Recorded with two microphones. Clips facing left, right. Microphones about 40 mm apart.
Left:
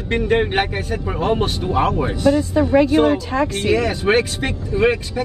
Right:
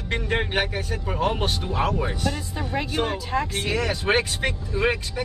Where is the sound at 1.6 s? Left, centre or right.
Left.